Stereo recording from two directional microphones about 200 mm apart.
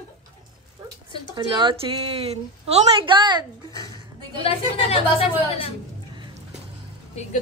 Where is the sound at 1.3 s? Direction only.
25° right (ahead or behind).